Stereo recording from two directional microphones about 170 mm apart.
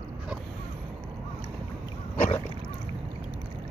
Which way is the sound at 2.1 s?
45° left (ahead or behind).